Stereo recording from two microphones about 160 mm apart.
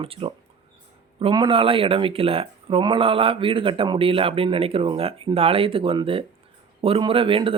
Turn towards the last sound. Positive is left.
turn(degrees=-35)  # may be behind; listen again after turning